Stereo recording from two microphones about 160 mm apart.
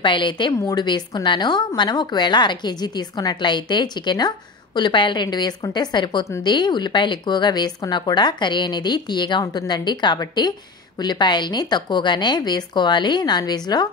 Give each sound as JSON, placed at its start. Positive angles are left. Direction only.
{"t": 0.0, "sound": "speech", "side_deg": 30}